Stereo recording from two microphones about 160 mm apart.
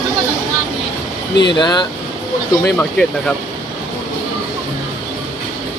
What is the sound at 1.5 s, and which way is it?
Speech, 25° left (ahead or behind).